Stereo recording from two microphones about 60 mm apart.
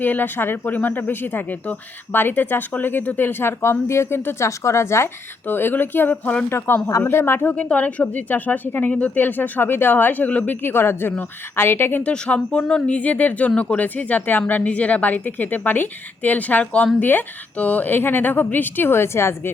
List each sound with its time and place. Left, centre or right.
0.0 s a woman's voice: left
4.4 s a woman's voice: left
5.5 s a woman's voice: left
7.5 s a woman's voice: centre; by 12.0 s left
12.0 s speech: centre
13.0 s a woman's voice: left